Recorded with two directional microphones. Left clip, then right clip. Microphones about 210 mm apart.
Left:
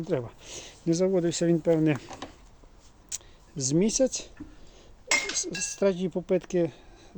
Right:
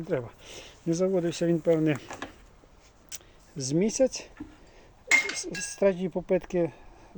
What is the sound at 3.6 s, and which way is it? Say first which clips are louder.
Speech: even; 15° left (ahead or behind).